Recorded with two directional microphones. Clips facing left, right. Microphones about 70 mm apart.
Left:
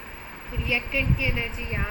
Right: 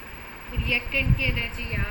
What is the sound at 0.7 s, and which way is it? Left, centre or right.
Speech, centre.